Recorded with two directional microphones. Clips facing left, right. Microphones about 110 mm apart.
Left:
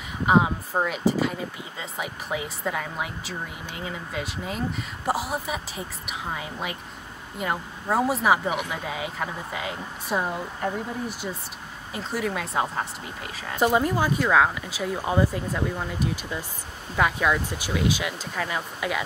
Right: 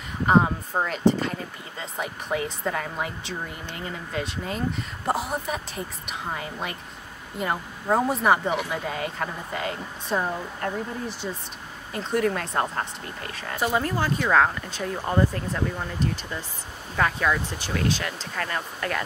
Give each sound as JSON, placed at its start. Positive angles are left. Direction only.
{"t": 0.3, "sound": "speech", "side_deg": 5}
{"t": 13.6, "sound": "speech", "side_deg": 15}